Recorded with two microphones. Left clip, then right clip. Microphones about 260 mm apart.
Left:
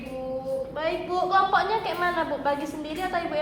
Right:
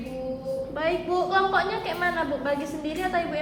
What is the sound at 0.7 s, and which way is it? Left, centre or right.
A woman's voice, centre.